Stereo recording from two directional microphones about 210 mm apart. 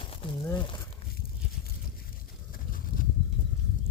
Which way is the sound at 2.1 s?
40° left (ahead or behind).